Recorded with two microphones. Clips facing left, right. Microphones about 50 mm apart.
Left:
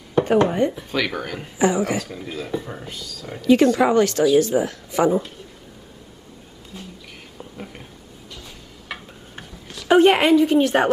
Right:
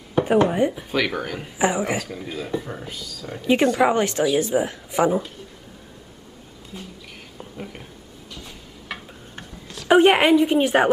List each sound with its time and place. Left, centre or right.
0.1 s speech: centre
1.6 s speech: right
2.0 s speech: centre
3.3 s speech: right
3.6 s a woman's voice: centre
3.9 s speech: right
6.7 s a woman's voice: centre
7.3 s whispering: centre
8.3 s a sound: centre
9.8 s a woman's voice: centre